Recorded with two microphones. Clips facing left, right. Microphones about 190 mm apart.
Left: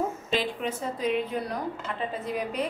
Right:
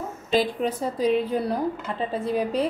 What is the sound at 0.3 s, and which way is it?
A woman's voice, 40° right (ahead or behind).